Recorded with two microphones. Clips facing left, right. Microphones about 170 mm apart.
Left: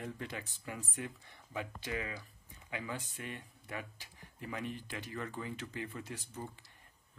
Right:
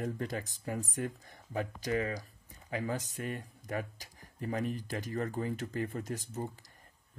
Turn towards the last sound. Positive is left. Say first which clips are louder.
# right 6 dB
turn(degrees=-40)  # may be behind; listen again after turning